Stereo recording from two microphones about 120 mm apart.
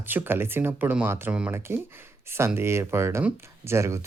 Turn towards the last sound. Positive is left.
turn(degrees=-25)  # may be behind; listen again after turning